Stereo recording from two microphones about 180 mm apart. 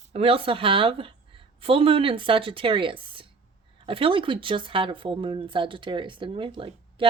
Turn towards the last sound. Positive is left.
turn(degrees=-30)  # may be behind; listen again after turning